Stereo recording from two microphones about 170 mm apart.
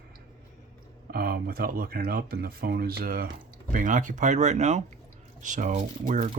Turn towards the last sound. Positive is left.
turn(degrees=-45)  # may be behind; listen again after turning